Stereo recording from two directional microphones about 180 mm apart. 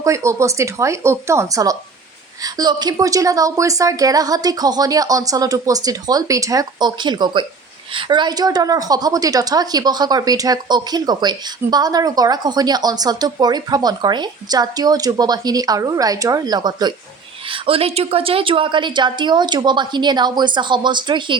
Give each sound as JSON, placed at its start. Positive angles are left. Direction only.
{"t": 0.0, "sound": "a woman's voice", "side_deg": -15}